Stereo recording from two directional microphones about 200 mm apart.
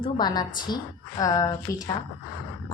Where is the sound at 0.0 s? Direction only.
20° left (ahead or behind).